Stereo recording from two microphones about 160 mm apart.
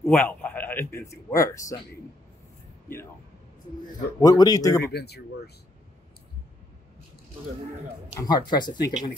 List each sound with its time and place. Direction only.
0.0 s a man's voice: 10° left (ahead or behind)
4.2 s speech: 25° left (ahead or behind)
4.9 s speech: 90° left
8.2 s speech: 25° left (ahead or behind)